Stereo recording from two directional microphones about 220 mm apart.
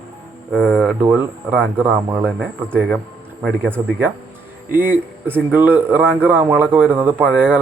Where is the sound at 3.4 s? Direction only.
10° right (ahead or behind).